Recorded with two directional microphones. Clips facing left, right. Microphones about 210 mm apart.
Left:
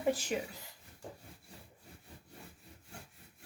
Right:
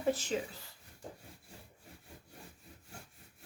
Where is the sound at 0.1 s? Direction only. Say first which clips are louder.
Even; 15° left (ahead or behind).